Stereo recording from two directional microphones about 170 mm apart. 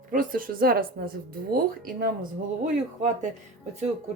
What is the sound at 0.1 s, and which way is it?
Speech, 55° right (ahead or behind).